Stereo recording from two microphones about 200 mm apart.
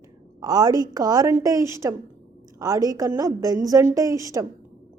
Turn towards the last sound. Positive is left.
turn(degrees=-15)  # may be behind; listen again after turning